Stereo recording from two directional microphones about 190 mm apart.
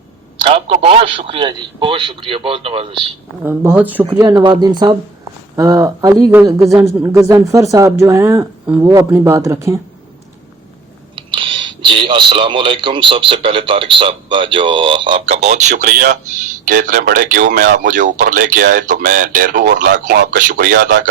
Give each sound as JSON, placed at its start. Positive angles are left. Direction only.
{"t": 0.4, "sound": "a man's voice", "side_deg": -30}
{"t": 3.4, "sound": "a man's voice", "side_deg": -10}
{"t": 11.1, "sound": "speech", "side_deg": -25}
{"t": 15.4, "sound": "speech", "side_deg": -40}